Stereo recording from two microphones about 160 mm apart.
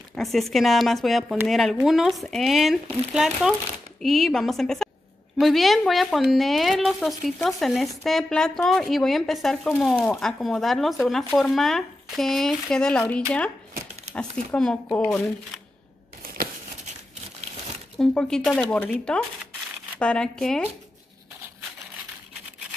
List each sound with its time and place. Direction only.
0.1 s speech: centre (ahead or behind)
14.1 s speech: 5° left (ahead or behind)
17.9 s speech: 5° left (ahead or behind)